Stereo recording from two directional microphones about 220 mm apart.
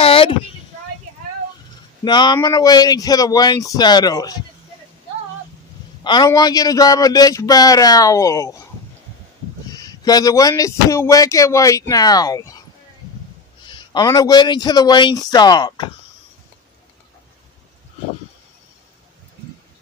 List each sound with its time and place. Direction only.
0.0 s a sound: 25° left (ahead or behind)
2.0 s speech: 20° left (ahead or behind)
6.0 s speech: 20° left (ahead or behind)
9.8 s speech: 15° left (ahead or behind)
13.7 s a man's voice: 20° left (ahead or behind)